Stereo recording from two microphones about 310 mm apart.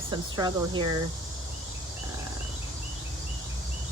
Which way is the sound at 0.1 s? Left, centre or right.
Centre.